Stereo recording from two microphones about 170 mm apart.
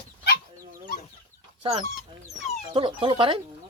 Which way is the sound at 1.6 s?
35° right (ahead or behind).